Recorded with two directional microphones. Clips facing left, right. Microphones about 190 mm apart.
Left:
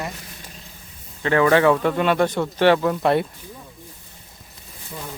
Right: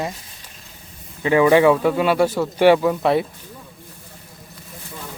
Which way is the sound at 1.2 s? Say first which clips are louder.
Right 3 dB; 10° right (ahead or behind).